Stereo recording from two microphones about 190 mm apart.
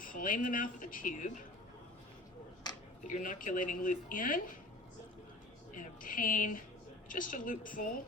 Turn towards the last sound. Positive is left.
turn(degrees=45)  # may be behind; listen again after turning